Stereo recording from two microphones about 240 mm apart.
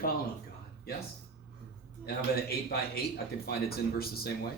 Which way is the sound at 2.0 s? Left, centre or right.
Left.